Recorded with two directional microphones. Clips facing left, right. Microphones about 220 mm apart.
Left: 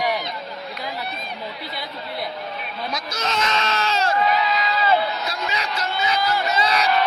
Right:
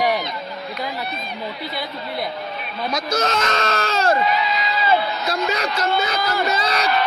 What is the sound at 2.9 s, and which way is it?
Speech, 50° right (ahead or behind).